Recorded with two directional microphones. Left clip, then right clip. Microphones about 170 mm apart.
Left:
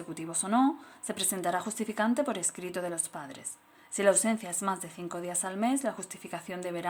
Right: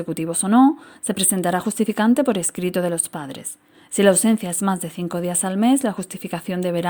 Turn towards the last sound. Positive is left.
turn(degrees=-50)  # may be behind; listen again after turning